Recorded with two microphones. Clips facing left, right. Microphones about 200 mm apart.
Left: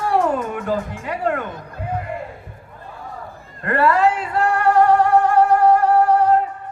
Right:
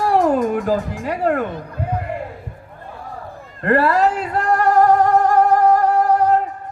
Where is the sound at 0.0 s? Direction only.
35° right (ahead or behind).